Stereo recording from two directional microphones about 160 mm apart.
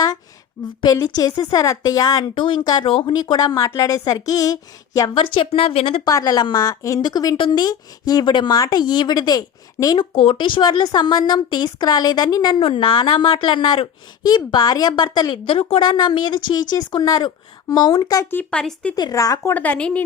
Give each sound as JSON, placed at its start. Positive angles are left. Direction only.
{"t": 0.9, "sound": "speech", "side_deg": 25}
{"t": 5.2, "sound": "speech", "side_deg": 35}
{"t": 6.1, "sound": "speech", "side_deg": 20}
{"t": 18.9, "sound": "a woman's voice", "side_deg": 25}